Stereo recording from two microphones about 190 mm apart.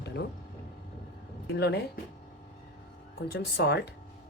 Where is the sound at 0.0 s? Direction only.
60° left (ahead or behind).